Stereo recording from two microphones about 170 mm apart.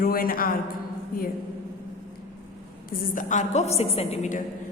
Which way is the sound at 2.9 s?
55° left (ahead or behind).